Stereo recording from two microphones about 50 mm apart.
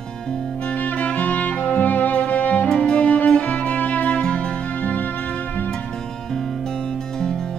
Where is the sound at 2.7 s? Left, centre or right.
Left.